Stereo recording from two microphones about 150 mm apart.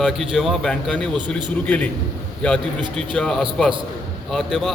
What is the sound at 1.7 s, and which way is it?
Speech, 10° left (ahead or behind).